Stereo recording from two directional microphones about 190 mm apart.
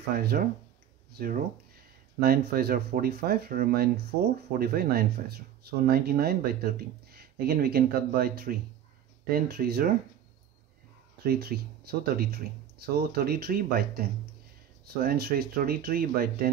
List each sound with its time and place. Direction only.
0.1 s speech: 55° right (ahead or behind)
11.2 s speech: 55° right (ahead or behind)